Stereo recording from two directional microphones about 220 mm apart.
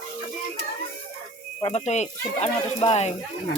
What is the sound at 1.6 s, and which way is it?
Speech, 30° left (ahead or behind).